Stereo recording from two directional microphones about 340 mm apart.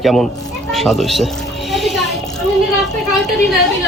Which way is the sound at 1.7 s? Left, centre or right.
Centre.